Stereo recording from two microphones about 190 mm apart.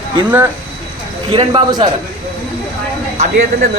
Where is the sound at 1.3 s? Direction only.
25° right (ahead or behind).